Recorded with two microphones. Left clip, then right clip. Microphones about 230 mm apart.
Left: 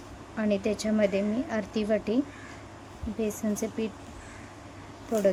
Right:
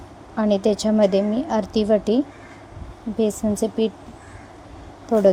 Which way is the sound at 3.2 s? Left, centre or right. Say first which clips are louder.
Right 9 dB; centre.